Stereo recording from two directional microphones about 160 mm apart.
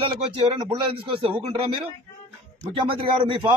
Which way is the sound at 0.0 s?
35° right (ahead or behind).